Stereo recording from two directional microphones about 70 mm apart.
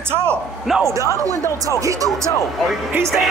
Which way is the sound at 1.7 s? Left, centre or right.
Right.